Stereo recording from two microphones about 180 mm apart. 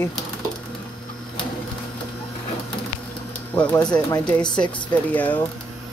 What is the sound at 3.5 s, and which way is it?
Speech, 10° left (ahead or behind).